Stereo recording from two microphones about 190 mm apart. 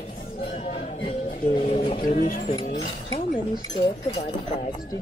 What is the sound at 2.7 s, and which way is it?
Speech, 45° left (ahead or behind).